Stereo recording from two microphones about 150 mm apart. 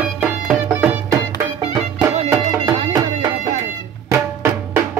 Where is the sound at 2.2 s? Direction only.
20° right (ahead or behind).